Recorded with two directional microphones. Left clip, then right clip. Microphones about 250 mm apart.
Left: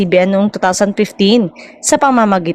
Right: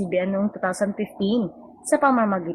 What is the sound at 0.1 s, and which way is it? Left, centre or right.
A woman's voice, left.